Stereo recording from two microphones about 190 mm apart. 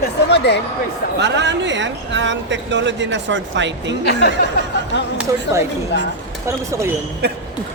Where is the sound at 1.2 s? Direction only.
70° right (ahead or behind).